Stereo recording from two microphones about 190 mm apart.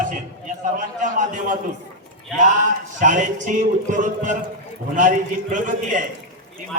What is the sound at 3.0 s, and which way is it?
A man's voice, 40° right (ahead or behind).